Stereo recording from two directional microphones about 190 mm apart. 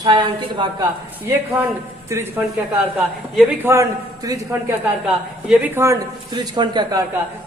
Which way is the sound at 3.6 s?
15° right (ahead or behind).